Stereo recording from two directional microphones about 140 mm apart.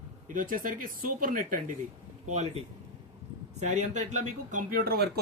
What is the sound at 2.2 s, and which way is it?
Speech, 55° right (ahead or behind).